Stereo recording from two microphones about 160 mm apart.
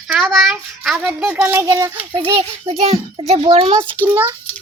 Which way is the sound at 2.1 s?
30° right (ahead or behind).